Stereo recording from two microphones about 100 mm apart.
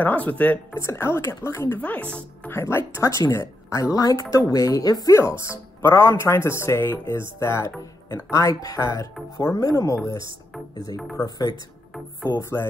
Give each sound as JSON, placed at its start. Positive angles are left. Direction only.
{"t": 0.0, "sound": "speech", "side_deg": 15}
{"t": 0.7, "sound": "speech", "side_deg": 25}
{"t": 1.8, "sound": "speech", "side_deg": 15}
{"t": 5.4, "sound": "speech", "side_deg": 25}
{"t": 11.1, "sound": "speech", "side_deg": 35}
{"t": 12.3, "sound": "speech", "side_deg": 25}